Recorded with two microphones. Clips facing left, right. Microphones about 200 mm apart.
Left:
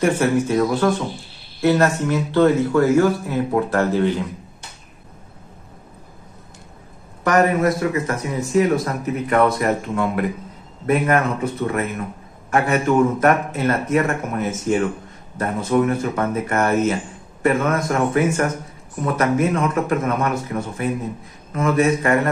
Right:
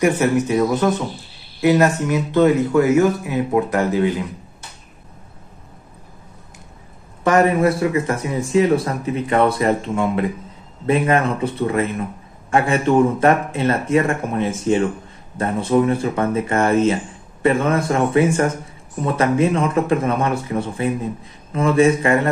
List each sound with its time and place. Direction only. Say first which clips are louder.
0.0 s speech: right 1 dB; 15° right (ahead or behind)
7.2 s speech: right 2 dB; 30° right (ahead or behind)